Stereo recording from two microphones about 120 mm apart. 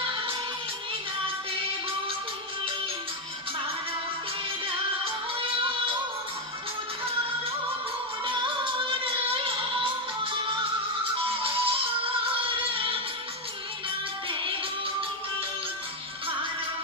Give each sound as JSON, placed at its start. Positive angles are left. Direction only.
{"t": 8.2, "sound": "music", "side_deg": -45}
{"t": 10.4, "sound": "music", "side_deg": -45}